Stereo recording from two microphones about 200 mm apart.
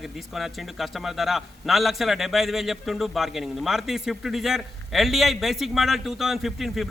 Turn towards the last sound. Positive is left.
turn(degrees=0)  # may be behind; listen again after turning